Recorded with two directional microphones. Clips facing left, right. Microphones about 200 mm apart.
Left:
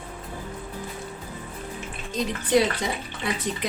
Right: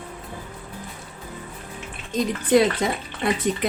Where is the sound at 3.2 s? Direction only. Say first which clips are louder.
Right 6 dB; 55° right (ahead or behind).